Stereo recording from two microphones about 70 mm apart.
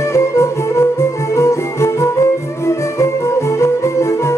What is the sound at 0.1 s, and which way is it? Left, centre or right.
Music, left.